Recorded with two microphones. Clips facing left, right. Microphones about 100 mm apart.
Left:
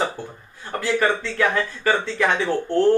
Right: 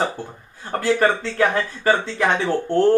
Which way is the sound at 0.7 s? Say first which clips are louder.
Right 3 dB; 35° right (ahead or behind).